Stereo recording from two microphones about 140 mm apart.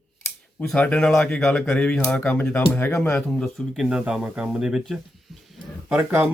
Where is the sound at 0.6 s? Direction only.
10° left (ahead or behind).